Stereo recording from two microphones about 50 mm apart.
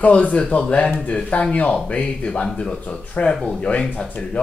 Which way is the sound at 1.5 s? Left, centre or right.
Left.